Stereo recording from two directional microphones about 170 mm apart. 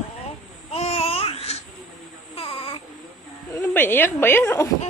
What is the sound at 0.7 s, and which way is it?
Babbling, 35° left (ahead or behind).